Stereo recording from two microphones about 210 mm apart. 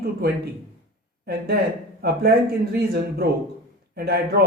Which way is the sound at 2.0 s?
50° right (ahead or behind).